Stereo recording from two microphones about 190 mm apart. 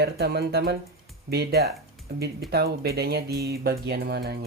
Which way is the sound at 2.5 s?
55° right (ahead or behind).